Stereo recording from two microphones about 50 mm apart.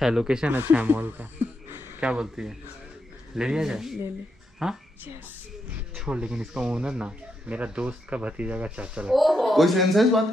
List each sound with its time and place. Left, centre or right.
0.0 s speech: centre
0.7 s speech: right
2.0 s speech: centre
5.9 s speech: right
9.1 s a man's voice: centre